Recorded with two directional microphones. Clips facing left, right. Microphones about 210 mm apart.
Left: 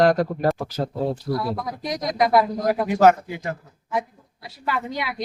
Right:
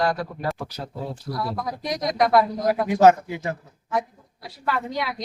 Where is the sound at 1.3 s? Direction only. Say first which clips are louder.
Left 1 dB; 55° left (ahead or behind).